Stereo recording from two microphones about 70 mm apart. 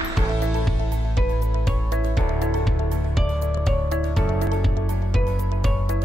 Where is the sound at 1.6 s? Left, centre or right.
Centre.